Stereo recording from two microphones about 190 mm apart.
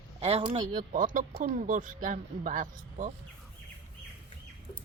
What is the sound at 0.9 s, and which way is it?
Speech, 45° right (ahead or behind).